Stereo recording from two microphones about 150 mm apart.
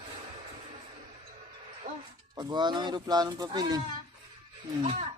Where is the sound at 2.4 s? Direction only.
30° right (ahead or behind).